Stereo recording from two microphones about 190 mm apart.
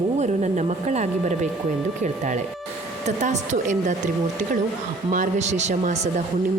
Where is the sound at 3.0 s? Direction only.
40° right (ahead or behind).